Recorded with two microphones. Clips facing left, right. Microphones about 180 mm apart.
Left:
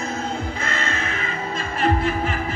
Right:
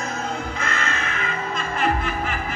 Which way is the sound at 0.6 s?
30° left (ahead or behind).